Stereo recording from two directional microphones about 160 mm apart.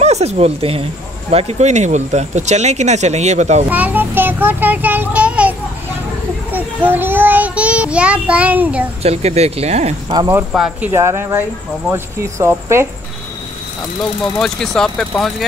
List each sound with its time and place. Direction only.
0.0 s speech: 40° right (ahead or behind)
3.7 s a child's voice: 10° right (ahead or behind)
6.5 s child singing: 10° right (ahead or behind)
9.0 s speech: 40° right (ahead or behind)
10.3 s speech: 5° right (ahead or behind)
10.9 s speech: 20° right (ahead or behind)
14.4 s speech: 5° left (ahead or behind)